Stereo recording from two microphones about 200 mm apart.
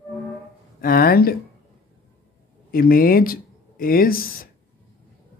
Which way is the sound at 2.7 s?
45° left (ahead or behind).